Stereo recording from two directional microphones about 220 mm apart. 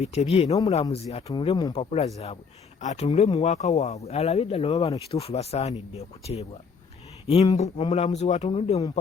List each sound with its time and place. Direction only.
0.0 s speech: 30° left (ahead or behind)
3.4 s speech: 30° left (ahead or behind)